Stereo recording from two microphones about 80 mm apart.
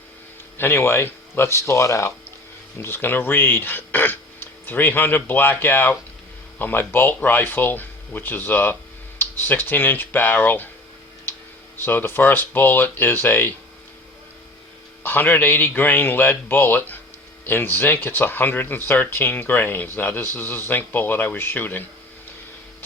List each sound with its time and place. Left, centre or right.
0.5 s speech: left
11.8 s speech: left
15.0 s speech: left